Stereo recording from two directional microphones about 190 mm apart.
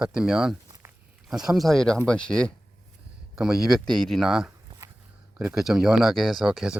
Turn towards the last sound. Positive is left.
turn(degrees=-5)  # may be behind; listen again after turning